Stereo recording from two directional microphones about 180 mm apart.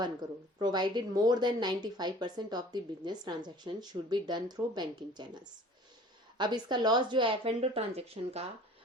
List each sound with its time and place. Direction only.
0.0 s a woman's voice: 25° right (ahead or behind)